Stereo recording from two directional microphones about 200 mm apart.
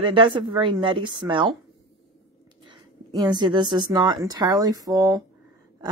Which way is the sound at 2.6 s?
20° right (ahead or behind).